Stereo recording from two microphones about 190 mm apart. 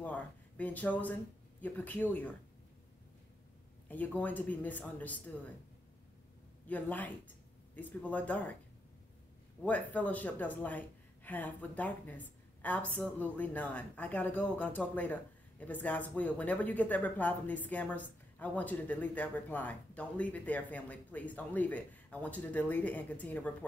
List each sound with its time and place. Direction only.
0.0 s speech: 10° left (ahead or behind)
3.9 s speech: 10° left (ahead or behind)
6.7 s speech: 10° left (ahead or behind)
9.6 s speech: 10° left (ahead or behind)